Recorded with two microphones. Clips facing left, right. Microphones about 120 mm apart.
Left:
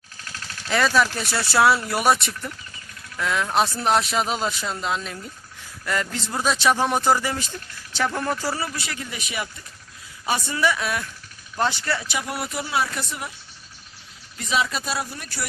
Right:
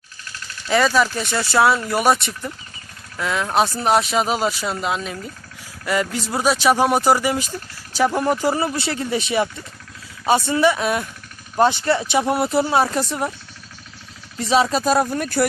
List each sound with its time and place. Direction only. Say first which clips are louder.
0.7 s speech: right 3 dB; centre (ahead or behind); by 13.3 s 35° right (ahead or behind)
14.3 s speech: right 7 dB; 35° right (ahead or behind)